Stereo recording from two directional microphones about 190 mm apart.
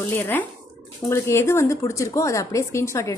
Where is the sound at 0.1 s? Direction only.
10° left (ahead or behind).